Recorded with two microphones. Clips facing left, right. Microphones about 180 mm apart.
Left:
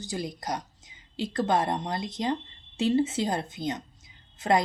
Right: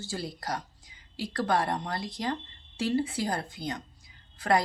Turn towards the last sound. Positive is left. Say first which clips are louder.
# left 2 dB
turn(degrees=20)  # may be behind; listen again after turning